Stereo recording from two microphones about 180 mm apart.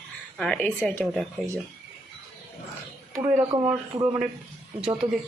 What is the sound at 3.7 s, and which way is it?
Speech, 20° right (ahead or behind).